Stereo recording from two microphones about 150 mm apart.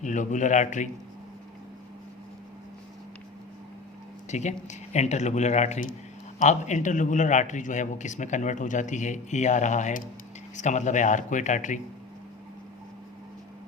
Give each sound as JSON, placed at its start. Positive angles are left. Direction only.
{"t": 0.0, "sound": "a man's voice", "side_deg": 55}
{"t": 4.3, "sound": "a man's voice", "side_deg": 50}